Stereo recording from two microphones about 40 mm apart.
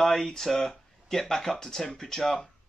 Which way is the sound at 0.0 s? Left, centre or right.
Centre.